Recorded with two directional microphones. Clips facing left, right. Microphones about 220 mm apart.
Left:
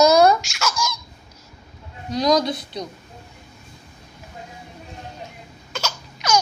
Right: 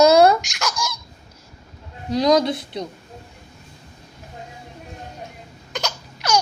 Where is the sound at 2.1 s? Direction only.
25° right (ahead or behind).